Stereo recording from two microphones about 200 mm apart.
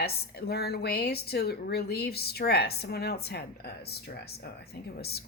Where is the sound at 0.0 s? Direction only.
50° left (ahead or behind).